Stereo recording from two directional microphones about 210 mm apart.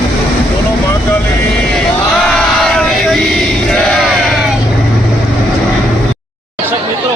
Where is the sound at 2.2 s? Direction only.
Centre (ahead or behind).